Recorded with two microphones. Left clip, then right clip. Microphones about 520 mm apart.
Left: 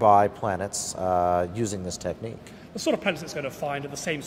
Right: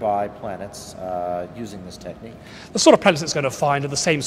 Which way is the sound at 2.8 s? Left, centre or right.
Right.